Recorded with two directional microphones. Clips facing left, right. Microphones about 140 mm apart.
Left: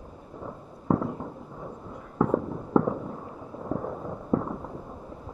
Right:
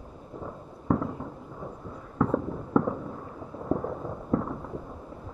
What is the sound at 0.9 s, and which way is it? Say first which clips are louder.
Fireworks: left 1 dB; 15° left (ahead or behind).